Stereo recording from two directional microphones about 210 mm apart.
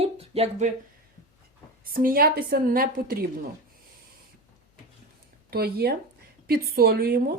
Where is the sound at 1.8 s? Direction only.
45° right (ahead or behind).